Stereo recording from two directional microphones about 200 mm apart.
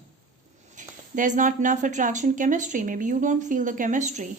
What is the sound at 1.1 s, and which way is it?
A woman's voice, 40° right (ahead or behind).